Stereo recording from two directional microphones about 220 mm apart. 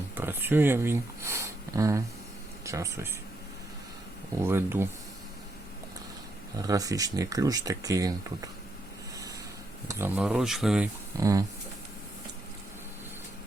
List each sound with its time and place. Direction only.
0.2 s speech: 10° right (ahead or behind)
4.4 s speech: 10° right (ahead or behind)
6.6 s speech: 15° right (ahead or behind)
9.9 s speech: 5° right (ahead or behind)
11.2 s speech: 15° right (ahead or behind)